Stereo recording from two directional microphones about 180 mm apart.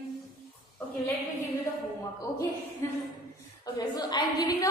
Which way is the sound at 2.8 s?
15° left (ahead or behind).